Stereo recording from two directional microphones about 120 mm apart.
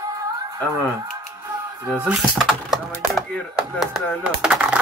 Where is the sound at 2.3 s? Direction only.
Centre (ahead or behind).